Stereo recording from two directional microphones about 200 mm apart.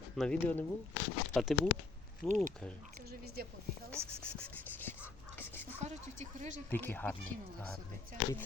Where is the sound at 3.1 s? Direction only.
50° right (ahead or behind).